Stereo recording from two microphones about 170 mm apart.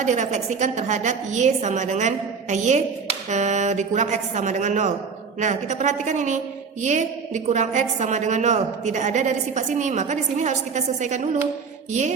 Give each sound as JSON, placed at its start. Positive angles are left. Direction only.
{"t": 0.0, "sound": "a woman's voice", "side_deg": -45}